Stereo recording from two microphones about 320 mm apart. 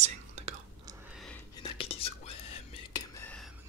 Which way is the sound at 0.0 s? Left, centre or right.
Centre.